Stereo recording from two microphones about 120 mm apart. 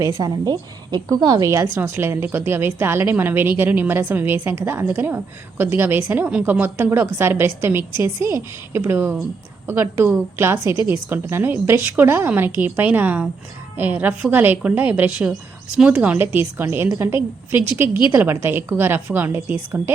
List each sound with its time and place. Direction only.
0.0 s a woman's voice: 30° right (ahead or behind)